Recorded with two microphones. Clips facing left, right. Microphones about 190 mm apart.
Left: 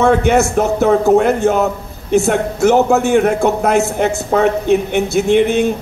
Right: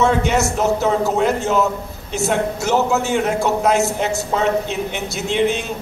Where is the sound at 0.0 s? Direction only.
55° left (ahead or behind).